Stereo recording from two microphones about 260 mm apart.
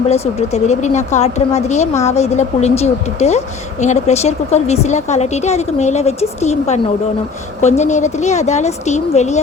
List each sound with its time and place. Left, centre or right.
0.1 s a woman's voice: left